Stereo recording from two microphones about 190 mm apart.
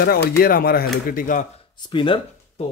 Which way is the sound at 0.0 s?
55° left (ahead or behind).